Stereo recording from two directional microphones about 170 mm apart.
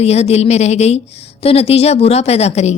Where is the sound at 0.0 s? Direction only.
40° left (ahead or behind).